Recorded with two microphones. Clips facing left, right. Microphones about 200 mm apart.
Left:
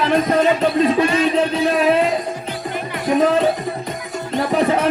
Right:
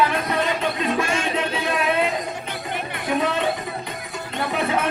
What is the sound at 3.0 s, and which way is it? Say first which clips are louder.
Music: left 7 dB; 40° left (ahead or behind).